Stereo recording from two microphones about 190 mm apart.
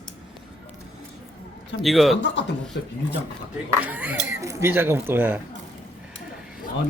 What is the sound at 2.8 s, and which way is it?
Speech, 65° left (ahead or behind).